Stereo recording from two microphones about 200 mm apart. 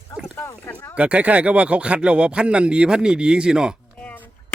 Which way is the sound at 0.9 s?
5° right (ahead or behind).